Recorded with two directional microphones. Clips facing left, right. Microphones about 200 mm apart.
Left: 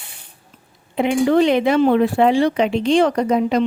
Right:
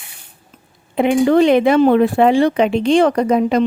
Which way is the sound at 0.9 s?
55° right (ahead or behind).